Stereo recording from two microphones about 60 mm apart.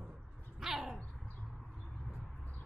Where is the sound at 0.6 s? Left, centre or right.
Centre.